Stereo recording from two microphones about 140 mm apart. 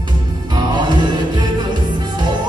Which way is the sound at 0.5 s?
30° right (ahead or behind).